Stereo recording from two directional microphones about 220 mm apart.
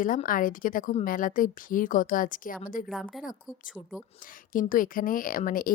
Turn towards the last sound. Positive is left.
turn(degrees=40)  # may be behind; listen again after turning